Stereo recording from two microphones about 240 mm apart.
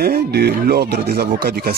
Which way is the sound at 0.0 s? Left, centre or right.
Right.